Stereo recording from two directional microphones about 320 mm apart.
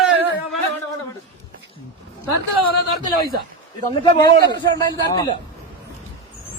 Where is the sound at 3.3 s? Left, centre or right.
Right.